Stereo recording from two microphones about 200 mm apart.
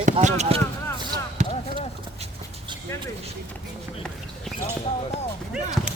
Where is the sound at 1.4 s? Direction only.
35° right (ahead or behind).